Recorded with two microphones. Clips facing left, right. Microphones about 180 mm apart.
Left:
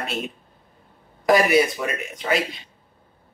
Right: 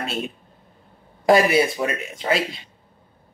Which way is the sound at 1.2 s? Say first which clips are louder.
Right 1 dB; 25° right (ahead or behind).